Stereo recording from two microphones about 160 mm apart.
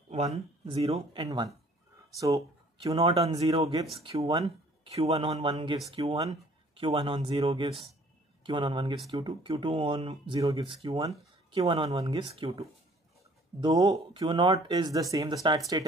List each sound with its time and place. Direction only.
0.1 s speech: 40° right (ahead or behind)
2.1 s speech: 20° right (ahead or behind)
4.0 s speech: 35° right (ahead or behind)